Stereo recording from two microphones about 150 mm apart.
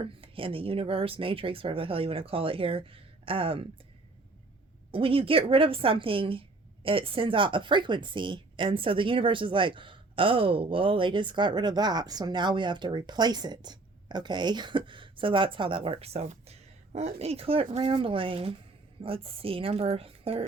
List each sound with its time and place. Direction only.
0.0 s a woman's voice: 35° right (ahead or behind)
4.9 s a woman's voice: 40° right (ahead or behind)